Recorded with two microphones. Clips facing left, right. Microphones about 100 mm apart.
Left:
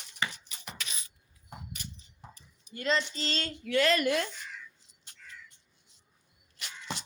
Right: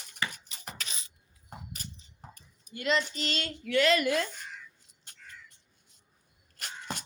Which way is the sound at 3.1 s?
35° left (ahead or behind).